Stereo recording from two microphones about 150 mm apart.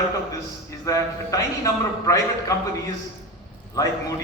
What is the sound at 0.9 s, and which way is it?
A man's voice, 25° left (ahead or behind).